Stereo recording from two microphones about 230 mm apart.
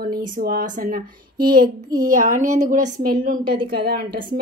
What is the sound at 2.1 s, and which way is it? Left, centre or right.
A woman's voice, right.